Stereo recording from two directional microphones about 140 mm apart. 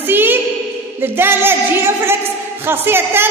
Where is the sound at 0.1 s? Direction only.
15° right (ahead or behind).